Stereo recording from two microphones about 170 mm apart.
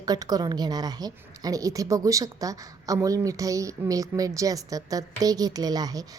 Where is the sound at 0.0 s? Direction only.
20° right (ahead or behind).